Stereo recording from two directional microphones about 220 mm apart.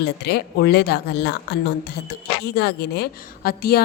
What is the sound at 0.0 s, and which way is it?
A woman's voice, 45° left (ahead or behind).